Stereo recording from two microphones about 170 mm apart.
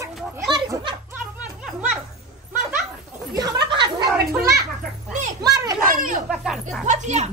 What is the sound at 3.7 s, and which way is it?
Speech, 25° right (ahead or behind).